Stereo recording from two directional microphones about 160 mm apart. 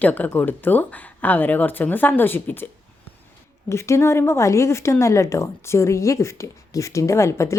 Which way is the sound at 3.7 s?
15° left (ahead or behind).